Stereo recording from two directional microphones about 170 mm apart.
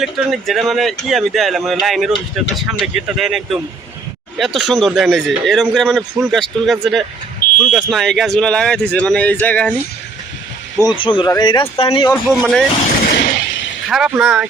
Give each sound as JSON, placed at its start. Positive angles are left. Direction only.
{"t": 0.0, "sound": "speech", "side_deg": 0}
{"t": 10.8, "sound": "speech", "side_deg": 30}
{"t": 12.1, "sound": "speech", "side_deg": 0}
{"t": 13.1, "sound": "a sound", "side_deg": 75}
{"t": 13.8, "sound": "speech", "side_deg": -5}